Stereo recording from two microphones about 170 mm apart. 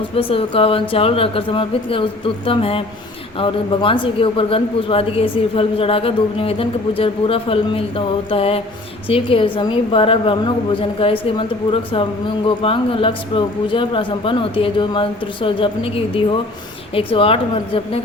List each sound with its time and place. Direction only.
0.2 s speech: 30° left (ahead or behind)